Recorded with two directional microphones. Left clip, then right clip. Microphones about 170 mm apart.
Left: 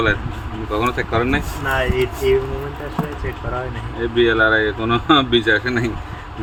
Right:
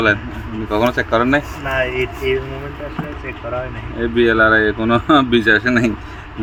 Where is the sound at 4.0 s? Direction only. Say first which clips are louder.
Right 2 dB; 60° right (ahead or behind); by 5.9 s 75° right (ahead or behind).